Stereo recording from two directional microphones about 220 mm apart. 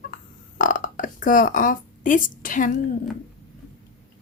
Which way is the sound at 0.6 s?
40° left (ahead or behind).